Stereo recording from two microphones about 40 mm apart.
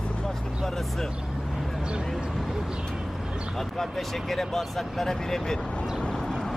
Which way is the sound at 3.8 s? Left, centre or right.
Centre.